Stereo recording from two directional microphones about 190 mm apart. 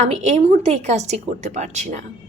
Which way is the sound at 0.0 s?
35° right (ahead or behind).